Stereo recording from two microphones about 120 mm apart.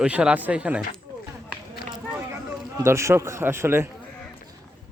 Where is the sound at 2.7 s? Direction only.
25° right (ahead or behind).